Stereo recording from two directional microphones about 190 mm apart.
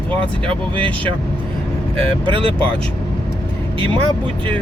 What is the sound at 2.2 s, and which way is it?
Speech, 25° right (ahead or behind).